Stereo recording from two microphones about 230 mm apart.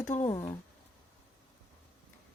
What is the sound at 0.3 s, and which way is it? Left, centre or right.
Speech, centre.